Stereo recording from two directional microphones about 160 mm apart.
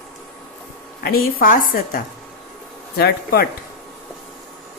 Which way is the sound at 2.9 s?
75° left (ahead or behind).